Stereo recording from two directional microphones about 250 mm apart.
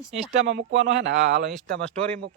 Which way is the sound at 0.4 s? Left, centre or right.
Right.